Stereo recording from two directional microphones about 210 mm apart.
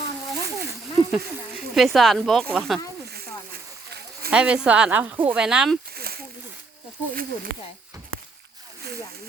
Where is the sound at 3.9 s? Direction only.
50° right (ahead or behind).